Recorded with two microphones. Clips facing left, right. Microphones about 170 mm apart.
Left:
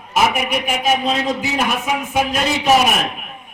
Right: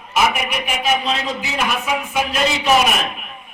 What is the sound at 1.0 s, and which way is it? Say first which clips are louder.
A man's voice: left 4 dB; 45° left (ahead or behind).